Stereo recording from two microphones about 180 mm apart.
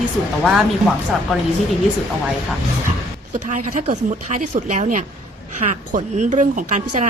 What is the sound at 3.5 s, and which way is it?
Speech, 45° right (ahead or behind).